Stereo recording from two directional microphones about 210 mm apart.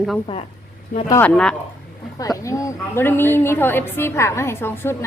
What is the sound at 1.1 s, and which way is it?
Speech, 10° left (ahead or behind).